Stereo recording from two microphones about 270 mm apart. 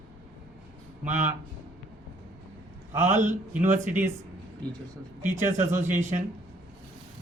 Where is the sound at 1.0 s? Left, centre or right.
Right.